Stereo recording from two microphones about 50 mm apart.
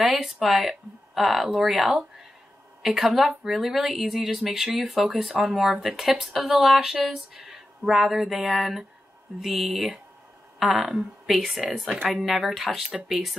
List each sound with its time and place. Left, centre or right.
0.0 s speech: centre